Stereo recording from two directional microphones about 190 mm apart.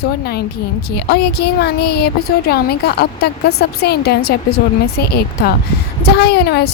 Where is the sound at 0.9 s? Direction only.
60° left (ahead or behind).